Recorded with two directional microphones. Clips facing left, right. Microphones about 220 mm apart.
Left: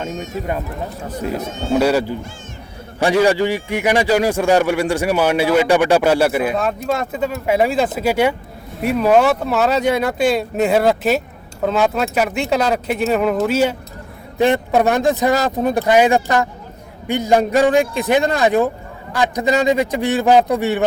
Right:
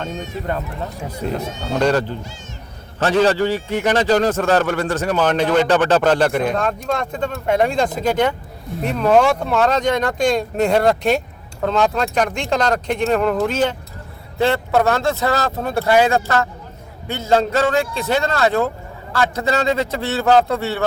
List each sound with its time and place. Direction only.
0.1 s speech: 45° left (ahead or behind)
1.7 s a man's voice: 10° left (ahead or behind)